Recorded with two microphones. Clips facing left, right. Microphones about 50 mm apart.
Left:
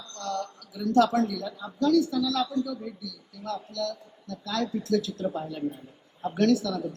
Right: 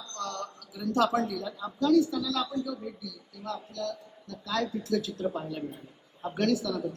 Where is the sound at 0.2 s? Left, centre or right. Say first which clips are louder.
Left 4 dB; right.